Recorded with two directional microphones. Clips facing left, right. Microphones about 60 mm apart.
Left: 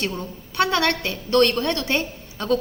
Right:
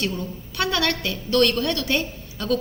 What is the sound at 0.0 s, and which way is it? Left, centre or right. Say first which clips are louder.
A woman's voice: even; left.